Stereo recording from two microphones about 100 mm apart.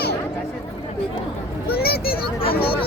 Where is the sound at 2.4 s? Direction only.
70° left (ahead or behind).